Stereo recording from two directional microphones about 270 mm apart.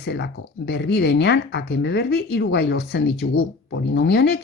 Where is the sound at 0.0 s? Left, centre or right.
Left.